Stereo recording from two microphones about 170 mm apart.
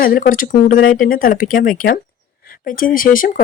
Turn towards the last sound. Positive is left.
turn(degrees=55)  # may be behind; listen again after turning